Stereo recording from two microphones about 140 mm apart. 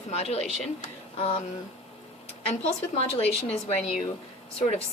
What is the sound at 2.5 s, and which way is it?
A woman's voice, 50° left (ahead or behind).